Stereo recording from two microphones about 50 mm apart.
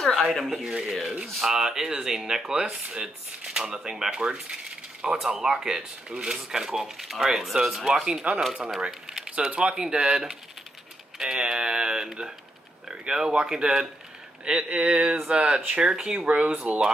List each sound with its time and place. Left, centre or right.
0.0 s speech: centre
0.7 s speech: centre
7.9 s speech: centre
8.8 s a sound: centre
9.6 s speech: centre
15.9 s speech: centre
16.2 s speech: right